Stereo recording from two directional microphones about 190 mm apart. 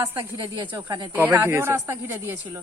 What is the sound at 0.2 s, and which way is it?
Speech, 20° right (ahead or behind).